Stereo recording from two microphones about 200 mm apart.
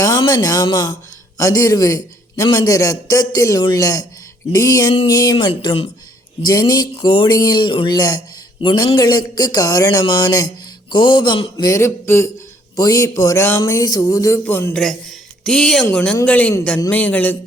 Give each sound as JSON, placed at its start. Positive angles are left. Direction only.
{"t": 0.0, "sound": "a man's voice", "side_deg": 15}